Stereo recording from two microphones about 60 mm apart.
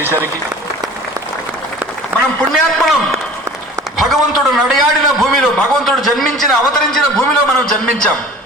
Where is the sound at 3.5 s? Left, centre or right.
Right.